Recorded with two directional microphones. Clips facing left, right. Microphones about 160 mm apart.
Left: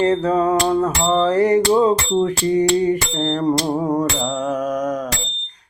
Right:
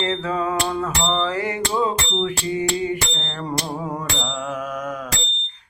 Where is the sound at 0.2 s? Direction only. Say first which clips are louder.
Left 7 dB; 40° left (ahead or behind).